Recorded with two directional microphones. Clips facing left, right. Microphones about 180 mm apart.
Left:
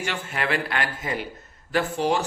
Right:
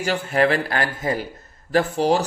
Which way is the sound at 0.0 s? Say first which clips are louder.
Right 9 dB; 40° right (ahead or behind).